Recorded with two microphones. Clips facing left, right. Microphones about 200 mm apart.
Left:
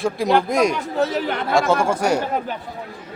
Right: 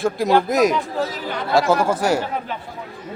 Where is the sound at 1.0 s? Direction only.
65° left (ahead or behind).